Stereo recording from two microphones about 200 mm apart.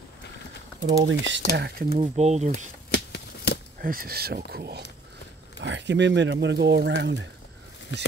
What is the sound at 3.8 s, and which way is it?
Speech, 45° right (ahead or behind).